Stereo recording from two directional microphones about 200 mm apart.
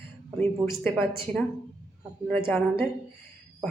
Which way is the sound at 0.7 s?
10° left (ahead or behind).